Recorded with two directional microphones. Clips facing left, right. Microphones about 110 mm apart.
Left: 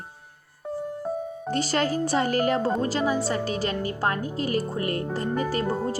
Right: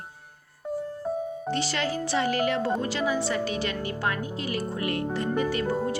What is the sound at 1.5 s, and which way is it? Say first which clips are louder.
A woman's voice: left 5 dB; 45° left (ahead or behind).